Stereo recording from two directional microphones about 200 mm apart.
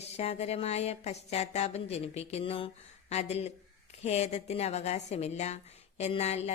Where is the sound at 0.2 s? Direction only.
30° left (ahead or behind).